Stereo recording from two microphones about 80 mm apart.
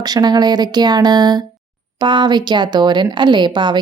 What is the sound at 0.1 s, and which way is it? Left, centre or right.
Speech, right.